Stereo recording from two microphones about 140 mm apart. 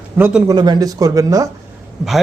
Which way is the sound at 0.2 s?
15° right (ahead or behind).